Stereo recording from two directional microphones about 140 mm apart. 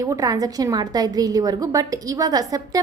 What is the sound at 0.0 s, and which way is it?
A woman's voice, 25° right (ahead or behind).